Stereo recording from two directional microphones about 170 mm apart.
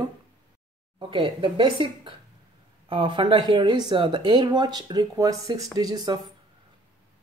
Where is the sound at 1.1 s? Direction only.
30° right (ahead or behind).